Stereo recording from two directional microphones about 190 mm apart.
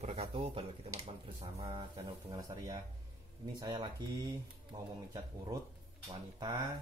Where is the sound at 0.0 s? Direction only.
35° right (ahead or behind).